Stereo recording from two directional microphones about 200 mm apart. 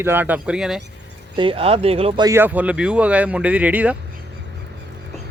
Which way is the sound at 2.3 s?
10° right (ahead or behind).